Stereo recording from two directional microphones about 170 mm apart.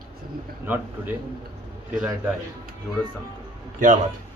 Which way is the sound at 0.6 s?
10° right (ahead or behind).